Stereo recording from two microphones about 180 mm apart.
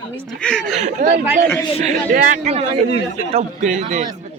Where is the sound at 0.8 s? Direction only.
40° right (ahead or behind).